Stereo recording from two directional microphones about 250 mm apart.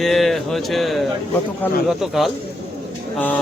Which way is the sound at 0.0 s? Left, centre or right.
Centre.